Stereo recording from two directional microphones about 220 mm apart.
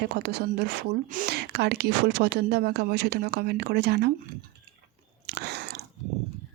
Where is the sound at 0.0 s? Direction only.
45° right (ahead or behind).